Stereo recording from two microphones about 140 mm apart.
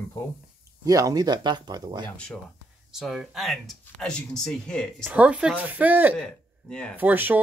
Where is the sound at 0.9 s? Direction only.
25° right (ahead or behind).